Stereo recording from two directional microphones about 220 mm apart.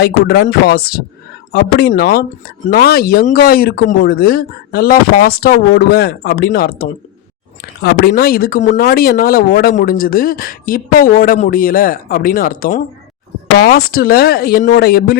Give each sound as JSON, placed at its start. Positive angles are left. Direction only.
{"t": 0.0, "sound": "speech", "side_deg": 45}